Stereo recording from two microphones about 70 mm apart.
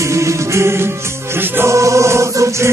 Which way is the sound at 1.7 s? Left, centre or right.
Right.